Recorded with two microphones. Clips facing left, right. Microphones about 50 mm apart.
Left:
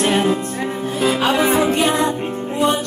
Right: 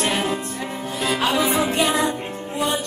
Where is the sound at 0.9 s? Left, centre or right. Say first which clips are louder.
Left 4 dB; left.